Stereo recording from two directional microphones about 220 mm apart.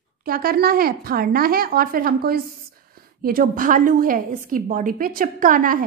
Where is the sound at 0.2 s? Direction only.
40° right (ahead or behind).